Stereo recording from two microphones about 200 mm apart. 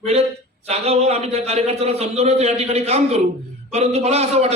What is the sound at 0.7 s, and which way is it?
A man's voice, 35° right (ahead or behind).